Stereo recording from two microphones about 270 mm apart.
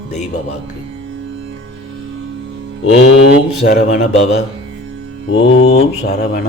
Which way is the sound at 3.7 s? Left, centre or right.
Left.